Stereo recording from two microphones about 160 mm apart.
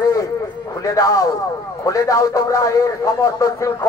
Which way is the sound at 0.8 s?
20° left (ahead or behind).